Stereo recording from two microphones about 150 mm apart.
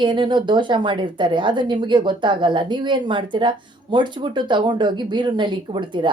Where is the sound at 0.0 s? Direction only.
30° right (ahead or behind).